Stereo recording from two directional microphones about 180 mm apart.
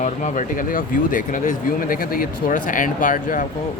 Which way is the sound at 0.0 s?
45° left (ahead or behind).